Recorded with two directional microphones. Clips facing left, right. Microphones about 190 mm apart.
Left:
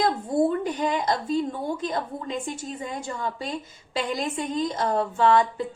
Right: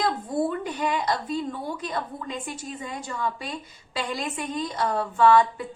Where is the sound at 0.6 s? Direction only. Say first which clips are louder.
Left 2 dB; 25° left (ahead or behind).